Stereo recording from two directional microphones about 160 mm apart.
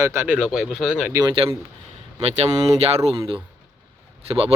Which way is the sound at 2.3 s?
40° right (ahead or behind).